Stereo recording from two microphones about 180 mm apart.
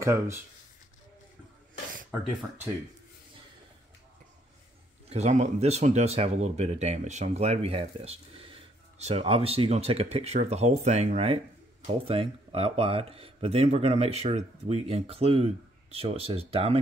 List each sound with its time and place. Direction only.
0.0 s speech: 15° right (ahead or behind)
2.0 s speech: 10° right (ahead or behind)
5.1 s speech: 40° right (ahead or behind)